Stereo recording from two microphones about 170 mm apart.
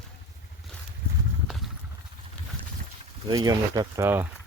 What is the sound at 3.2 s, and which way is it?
Speech, 25° right (ahead or behind).